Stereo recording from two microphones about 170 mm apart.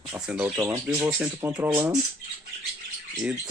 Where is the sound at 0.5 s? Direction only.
15° right (ahead or behind).